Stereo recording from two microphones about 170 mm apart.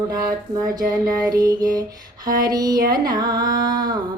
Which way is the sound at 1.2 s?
20° right (ahead or behind).